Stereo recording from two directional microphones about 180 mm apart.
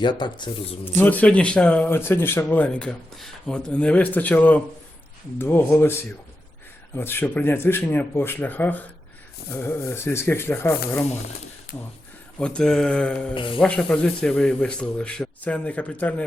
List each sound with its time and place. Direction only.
0.0 s speech: 25° left (ahead or behind)
0.9 s speech: 10° left (ahead or behind)
11.7 s speech: 55° left (ahead or behind)
12.4 s speech: 5° left (ahead or behind)
13.3 s speech: 30° left (ahead or behind)
13.6 s speech: 5° left (ahead or behind)